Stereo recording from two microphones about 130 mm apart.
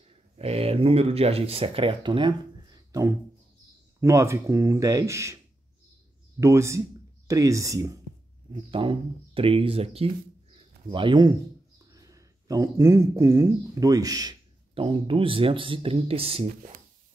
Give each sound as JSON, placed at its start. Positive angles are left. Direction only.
{"t": 0.4, "sound": "speech", "side_deg": -50}
{"t": 2.9, "sound": "music", "side_deg": -20}
{"t": 4.0, "sound": "speech", "side_deg": -20}
{"t": 6.4, "sound": "speech", "side_deg": -20}
{"t": 8.6, "sound": "speech", "side_deg": -40}
{"t": 10.9, "sound": "speech", "side_deg": -40}
{"t": 14.7, "sound": "speech", "side_deg": -45}